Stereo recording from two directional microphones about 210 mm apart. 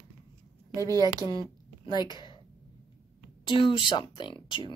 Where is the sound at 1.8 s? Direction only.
20° left (ahead or behind).